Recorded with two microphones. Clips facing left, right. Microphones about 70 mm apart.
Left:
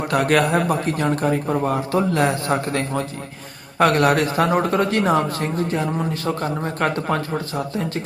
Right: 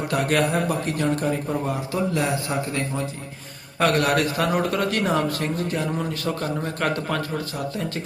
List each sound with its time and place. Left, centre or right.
0.1 s speech: left
3.8 s speech: left